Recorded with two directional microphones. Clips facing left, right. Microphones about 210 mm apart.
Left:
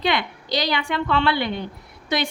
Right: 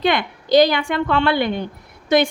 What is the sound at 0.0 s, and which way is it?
A woman's voice, 50° right (ahead or behind).